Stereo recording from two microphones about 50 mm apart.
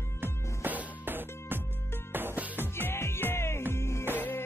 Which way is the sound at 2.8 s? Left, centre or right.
Left.